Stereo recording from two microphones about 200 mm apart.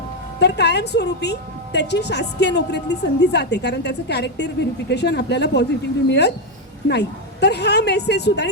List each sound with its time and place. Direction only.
0.3 s a woman's voice: 60° left (ahead or behind)